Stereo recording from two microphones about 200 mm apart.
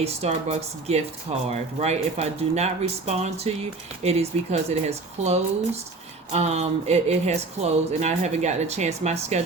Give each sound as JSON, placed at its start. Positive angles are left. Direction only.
{"t": 0.0, "sound": "speech", "side_deg": -30}